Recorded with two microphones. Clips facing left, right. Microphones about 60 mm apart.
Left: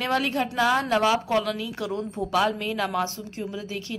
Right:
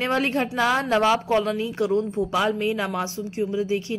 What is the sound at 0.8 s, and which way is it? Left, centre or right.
Speech, right.